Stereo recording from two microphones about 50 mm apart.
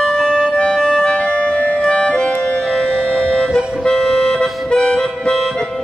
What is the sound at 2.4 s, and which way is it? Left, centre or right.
Music, centre.